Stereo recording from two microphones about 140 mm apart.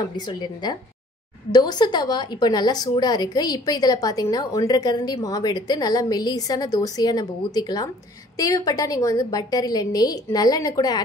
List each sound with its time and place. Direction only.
0.1 s a woman's voice: 30° left (ahead or behind)